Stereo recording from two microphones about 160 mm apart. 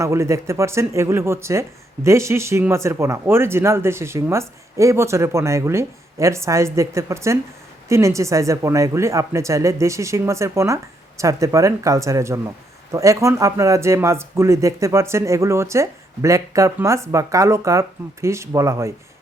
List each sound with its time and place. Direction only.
0.0 s speech: 15° right (ahead or behind)